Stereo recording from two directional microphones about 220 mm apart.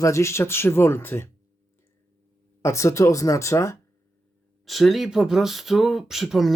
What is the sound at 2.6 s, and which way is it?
Speech, 15° left (ahead or behind).